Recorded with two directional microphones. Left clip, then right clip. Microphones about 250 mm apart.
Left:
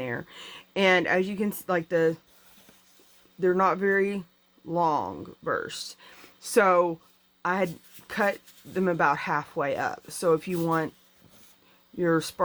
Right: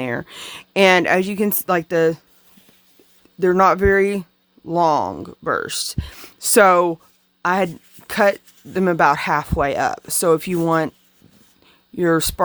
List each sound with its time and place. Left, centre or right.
0.0 s speech: right
3.4 s speech: right
11.9 s speech: right